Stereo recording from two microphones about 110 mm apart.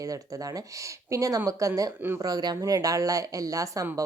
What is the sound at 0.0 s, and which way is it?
Speech, 30° right (ahead or behind).